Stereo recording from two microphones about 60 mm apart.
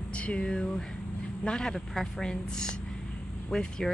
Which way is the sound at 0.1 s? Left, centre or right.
Centre.